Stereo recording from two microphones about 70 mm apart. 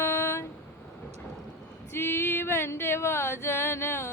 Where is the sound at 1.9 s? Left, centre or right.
Left.